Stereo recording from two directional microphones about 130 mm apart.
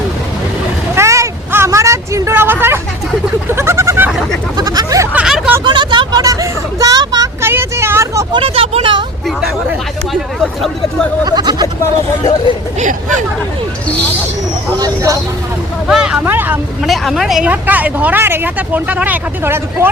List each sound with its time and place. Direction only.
0.9 s vehicle: 25° right (ahead or behind)
3.5 s goat: 20° right (ahead or behind)
4.5 s a sound: 30° right (ahead or behind)
5.1 s hubbub: 10° right (ahead or behind)
5.6 s hubbub: 35° right (ahead or behind)
7.4 s vehicle: 20° right (ahead or behind)
8.3 s vehicle: 45° right (ahead or behind)
10.1 s speech: centre (ahead or behind)
11.3 s speech: 30° right (ahead or behind)
12.8 s speech: 80° right
14.8 s speech: 25° right (ahead or behind)
15.9 s speech: 5° right (ahead or behind)
16.8 s speech: centre (ahead or behind)
17.5 s speech: 10° right (ahead or behind)